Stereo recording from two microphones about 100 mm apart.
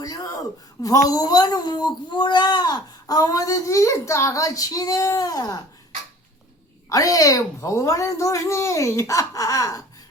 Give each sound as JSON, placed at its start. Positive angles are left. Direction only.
{"t": 0.0, "sound": "a woman's voice", "side_deg": 35}
{"t": 6.9, "sound": "a woman's voice", "side_deg": 35}